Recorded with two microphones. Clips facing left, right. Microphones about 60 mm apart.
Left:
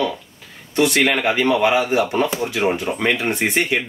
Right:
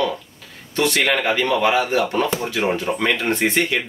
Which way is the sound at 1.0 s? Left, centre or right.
Centre.